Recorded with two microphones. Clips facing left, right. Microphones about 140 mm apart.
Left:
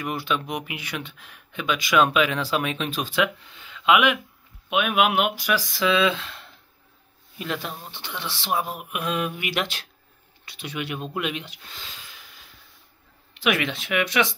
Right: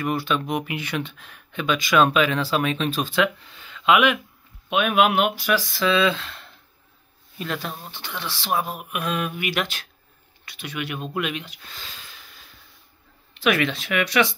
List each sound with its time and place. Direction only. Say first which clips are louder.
0.0 s speech: right 3 dB; 15° left (ahead or behind)
13.3 s speech: right 3 dB; 15° left (ahead or behind)